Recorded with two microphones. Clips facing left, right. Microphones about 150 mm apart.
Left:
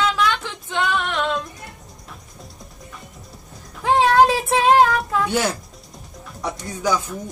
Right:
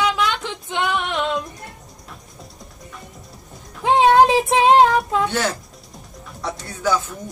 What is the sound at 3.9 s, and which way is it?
Child singing, 20° right (ahead or behind).